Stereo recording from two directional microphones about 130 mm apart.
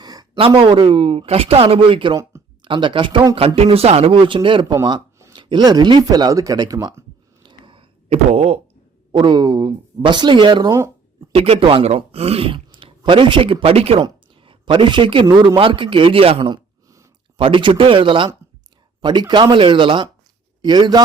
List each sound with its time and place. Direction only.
0.0 s a sound: 30° right (ahead or behind)
0.3 s speech: 45° right (ahead or behind)
4.8 s speech: 30° right (ahead or behind)
7.4 s a sound: 40° right (ahead or behind)
9.1 s speech: 35° right (ahead or behind)
10.7 s speech: 20° right (ahead or behind)
11.3 s speech: 45° right (ahead or behind)
14.0 s speech: 40° right (ahead or behind)
16.4 s a sound: 35° right (ahead or behind)
17.3 s a man's voice: 40° right (ahead or behind)